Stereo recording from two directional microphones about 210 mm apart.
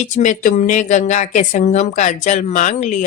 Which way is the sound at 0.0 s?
35° left (ahead or behind).